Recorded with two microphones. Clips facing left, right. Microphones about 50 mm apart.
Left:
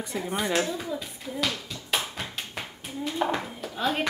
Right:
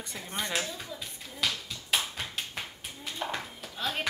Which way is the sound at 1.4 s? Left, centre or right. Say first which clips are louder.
Left 2 dB; centre.